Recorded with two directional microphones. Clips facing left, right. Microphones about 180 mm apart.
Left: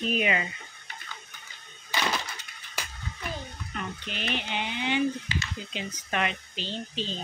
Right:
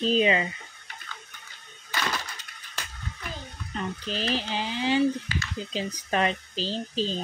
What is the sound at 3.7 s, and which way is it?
Speech, 35° right (ahead or behind).